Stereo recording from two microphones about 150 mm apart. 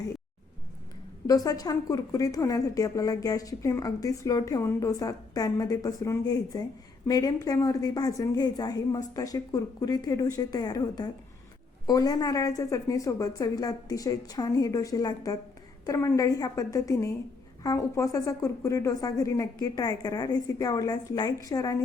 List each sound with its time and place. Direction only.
1.3 s a woman's voice: 25° left (ahead or behind)